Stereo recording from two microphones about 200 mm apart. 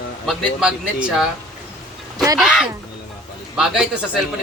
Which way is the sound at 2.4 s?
Centre (ahead or behind).